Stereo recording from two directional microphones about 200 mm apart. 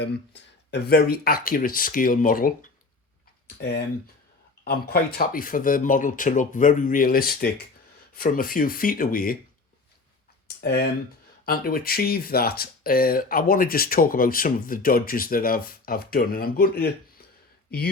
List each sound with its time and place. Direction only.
0.0 s speech: 55° left (ahead or behind)
4.6 s speech: 50° left (ahead or behind)
10.6 s speech: 55° left (ahead or behind)